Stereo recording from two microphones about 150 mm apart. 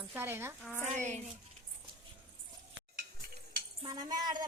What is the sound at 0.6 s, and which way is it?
Speech, 10° left (ahead or behind).